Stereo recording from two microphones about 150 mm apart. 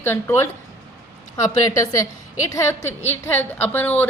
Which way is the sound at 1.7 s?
20° left (ahead or behind).